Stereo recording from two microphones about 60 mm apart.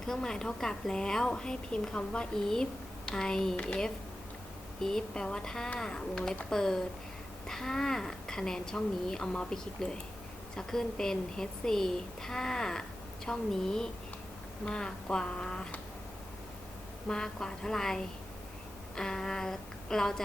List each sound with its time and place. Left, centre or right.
0.0 s a woman's voice: centre
4.8 s a woman's voice: centre
17.1 s a woman's voice: centre